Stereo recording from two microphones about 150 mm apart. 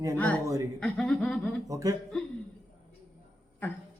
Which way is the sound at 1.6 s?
20° right (ahead or behind).